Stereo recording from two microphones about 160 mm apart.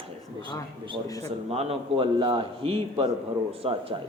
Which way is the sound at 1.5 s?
40° right (ahead or behind).